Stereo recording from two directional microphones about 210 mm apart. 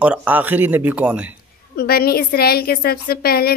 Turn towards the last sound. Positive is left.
turn(degrees=45)  # may be behind; listen again after turning